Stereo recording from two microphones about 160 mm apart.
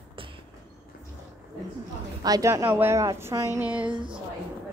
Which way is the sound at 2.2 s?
20° right (ahead or behind).